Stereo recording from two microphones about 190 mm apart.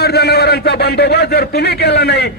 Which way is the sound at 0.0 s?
60° left (ahead or behind).